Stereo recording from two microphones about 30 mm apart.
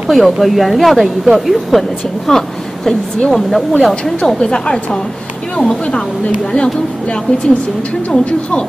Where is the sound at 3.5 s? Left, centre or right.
Centre.